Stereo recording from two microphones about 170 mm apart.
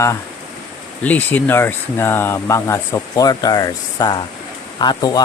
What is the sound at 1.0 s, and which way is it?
Speech, 10° left (ahead or behind).